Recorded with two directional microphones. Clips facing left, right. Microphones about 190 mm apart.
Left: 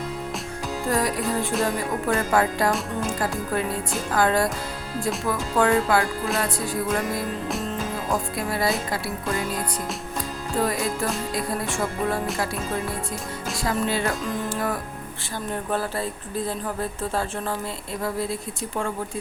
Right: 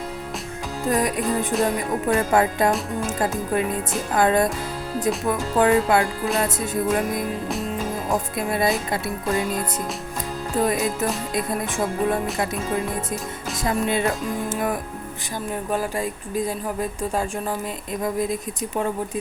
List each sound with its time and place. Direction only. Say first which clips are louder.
0.9 s speech: right 3 dB; 20° right (ahead or behind)
8.4 s speech: right 4 dB; 20° right (ahead or behind)
10.6 s speech: right 3 dB; 20° right (ahead or behind)
13.7 s speech: right 3 dB; 20° right (ahead or behind)